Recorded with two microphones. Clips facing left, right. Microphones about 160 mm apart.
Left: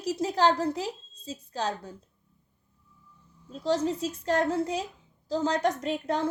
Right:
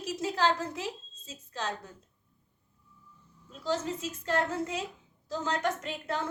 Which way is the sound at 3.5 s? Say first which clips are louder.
Left 5 dB; 35° left (ahead or behind).